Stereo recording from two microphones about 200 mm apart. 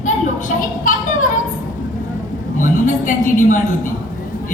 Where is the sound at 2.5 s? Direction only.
40° left (ahead or behind).